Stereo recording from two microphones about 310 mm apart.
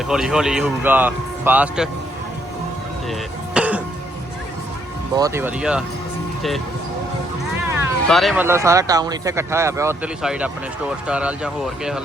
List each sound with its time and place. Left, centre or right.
0.1 s speech: centre
3.5 s music: centre
5.1 s speech: centre
7.6 s music: centre
8.0 s speech: centre